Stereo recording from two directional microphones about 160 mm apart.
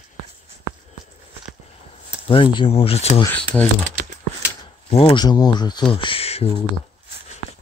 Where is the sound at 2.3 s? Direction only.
30° left (ahead or behind).